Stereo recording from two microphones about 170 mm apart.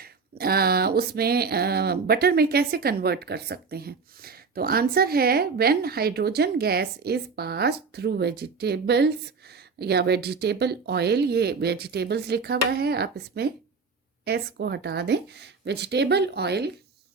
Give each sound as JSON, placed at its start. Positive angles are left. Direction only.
{"t": 0.0, "sound": "speech", "side_deg": -65}